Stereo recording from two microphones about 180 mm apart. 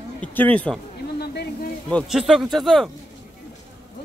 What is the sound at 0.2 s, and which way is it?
Speech, 5° left (ahead or behind).